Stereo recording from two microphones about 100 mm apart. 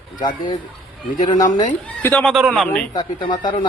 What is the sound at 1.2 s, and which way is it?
Speech, 40° left (ahead or behind).